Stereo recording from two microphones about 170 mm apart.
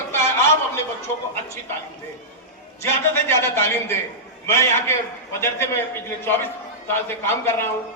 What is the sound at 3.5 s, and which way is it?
A man's voice, 15° left (ahead or behind).